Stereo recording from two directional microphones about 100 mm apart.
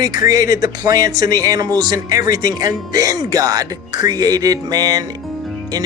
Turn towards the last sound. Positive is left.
turn(degrees=-40)  # may be behind; listen again after turning